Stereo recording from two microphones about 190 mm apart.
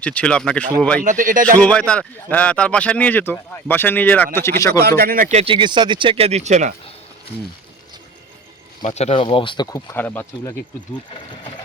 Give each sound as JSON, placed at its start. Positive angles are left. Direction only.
{"t": 0.0, "sound": "speech", "side_deg": 5}
{"t": 1.0, "sound": "speech", "side_deg": -45}
{"t": 1.6, "sound": "speech", "side_deg": 5}
{"t": 4.8, "sound": "speech", "side_deg": -55}
{"t": 8.8, "sound": "speech", "side_deg": 35}